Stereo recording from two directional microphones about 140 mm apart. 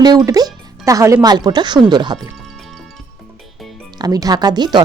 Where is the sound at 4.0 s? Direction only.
25° right (ahead or behind).